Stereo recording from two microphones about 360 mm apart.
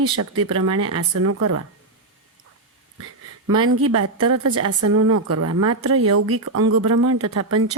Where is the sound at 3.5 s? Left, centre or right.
Right.